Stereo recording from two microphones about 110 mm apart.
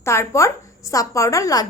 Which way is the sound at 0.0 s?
25° left (ahead or behind).